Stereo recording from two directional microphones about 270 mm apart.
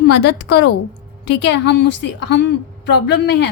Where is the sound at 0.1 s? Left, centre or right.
Left.